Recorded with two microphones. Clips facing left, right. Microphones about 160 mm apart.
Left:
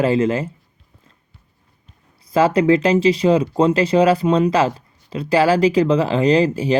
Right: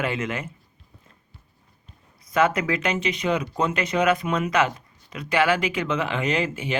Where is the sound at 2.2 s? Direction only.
30° left (ahead or behind).